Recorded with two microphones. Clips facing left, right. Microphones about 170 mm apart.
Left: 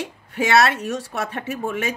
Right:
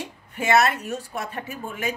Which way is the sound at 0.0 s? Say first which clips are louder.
Left 5 dB; 90° left.